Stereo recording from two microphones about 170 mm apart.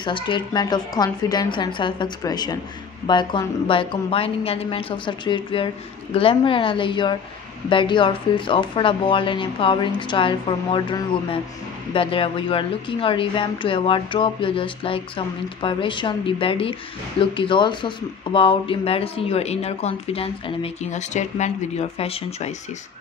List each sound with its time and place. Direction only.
0.0 s speech: 30° left (ahead or behind)